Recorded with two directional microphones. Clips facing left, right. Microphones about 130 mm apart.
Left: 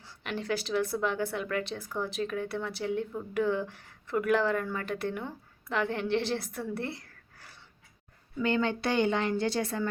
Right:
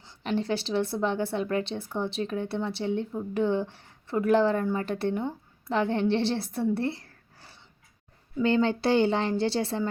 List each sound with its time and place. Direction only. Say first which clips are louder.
0.0 s speech: right 7 dB; 30° right (ahead or behind)